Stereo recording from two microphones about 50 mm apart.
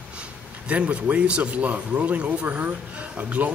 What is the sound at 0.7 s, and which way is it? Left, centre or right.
Speech, right.